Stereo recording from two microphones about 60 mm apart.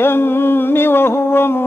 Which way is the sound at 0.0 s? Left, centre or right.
Left.